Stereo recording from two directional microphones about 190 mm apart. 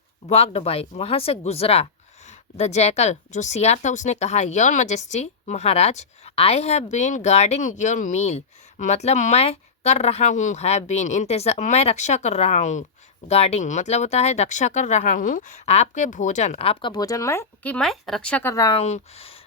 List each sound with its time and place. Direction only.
0.3 s speech: 35° left (ahead or behind)
18.8 s speech: 35° left (ahead or behind)